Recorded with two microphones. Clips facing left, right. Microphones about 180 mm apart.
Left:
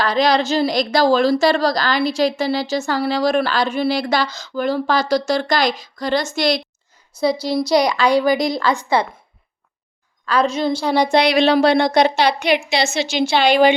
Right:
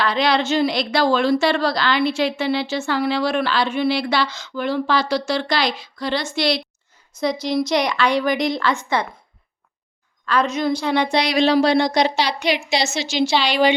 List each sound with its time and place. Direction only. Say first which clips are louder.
0.0 s a woman's voice: left 3 dB; 40° left (ahead or behind)
7.1 s a woman's voice: left 3 dB; 30° left (ahead or behind)
10.2 s a woman's voice: left 2 dB; 35° left (ahead or behind)
11.2 s a woman's voice: left 2 dB; 60° left (ahead or behind)